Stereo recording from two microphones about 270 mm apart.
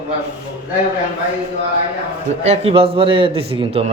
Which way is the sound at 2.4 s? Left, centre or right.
Right.